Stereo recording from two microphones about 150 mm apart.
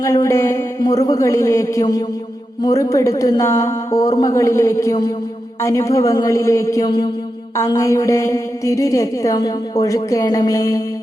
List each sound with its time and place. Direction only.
0.0 s a woman's voice: 20° left (ahead or behind)